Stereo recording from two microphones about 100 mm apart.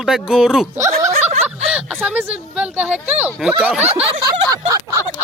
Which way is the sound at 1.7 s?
10° right (ahead or behind).